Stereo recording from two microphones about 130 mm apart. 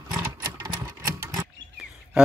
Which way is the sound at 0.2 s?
20° right (ahead or behind).